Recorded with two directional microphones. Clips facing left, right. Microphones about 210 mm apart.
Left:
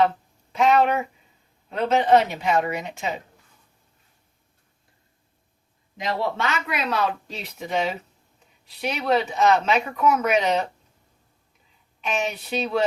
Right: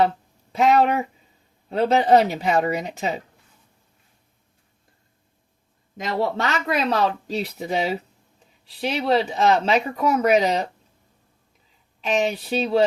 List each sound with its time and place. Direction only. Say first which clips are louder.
0.5 s speech: right 1 dB; 35° right (ahead or behind)
6.0 s speech: right 2 dB; 45° right (ahead or behind)
12.0 s speech: right 5 dB; 35° right (ahead or behind)